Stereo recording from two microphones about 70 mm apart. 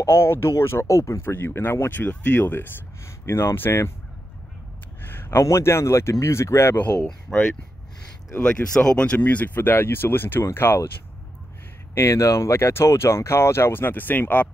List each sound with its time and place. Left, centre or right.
0.0 s speech: left
5.0 s a sound: left
5.4 s speech: left
7.3 s speech: centre; by 10.9 s left
11.9 s speech: left